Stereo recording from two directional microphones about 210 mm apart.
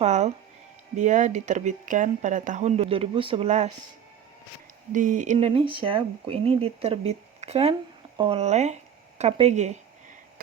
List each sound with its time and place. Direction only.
0.0 s speech: 30° right (ahead or behind)
4.9 s speech: 40° right (ahead or behind)